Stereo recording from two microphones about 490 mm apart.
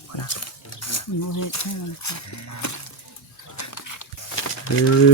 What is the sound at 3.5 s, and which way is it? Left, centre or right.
Dog, left.